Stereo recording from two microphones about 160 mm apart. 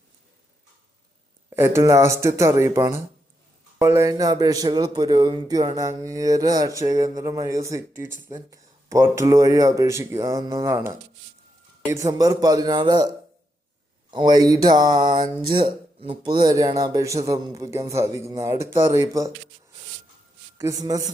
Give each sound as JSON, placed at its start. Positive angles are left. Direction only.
{"t": 1.5, "sound": "speech", "side_deg": -15}
{"t": 20.6, "sound": "speech", "side_deg": -20}